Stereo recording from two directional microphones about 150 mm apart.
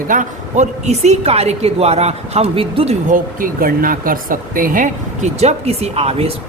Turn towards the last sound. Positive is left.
turn(degrees=-45)  # may be behind; listen again after turning